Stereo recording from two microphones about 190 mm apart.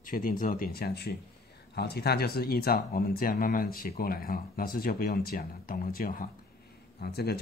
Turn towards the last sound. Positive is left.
turn(degrees=55)  # may be behind; listen again after turning